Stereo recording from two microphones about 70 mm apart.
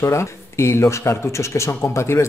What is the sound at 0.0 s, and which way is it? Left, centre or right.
Speech, left.